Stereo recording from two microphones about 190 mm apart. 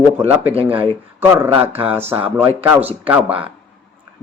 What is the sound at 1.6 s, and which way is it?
Speech, 30° right (ahead or behind).